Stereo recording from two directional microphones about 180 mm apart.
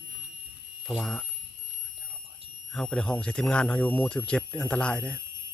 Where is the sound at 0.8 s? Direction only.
5° left (ahead or behind).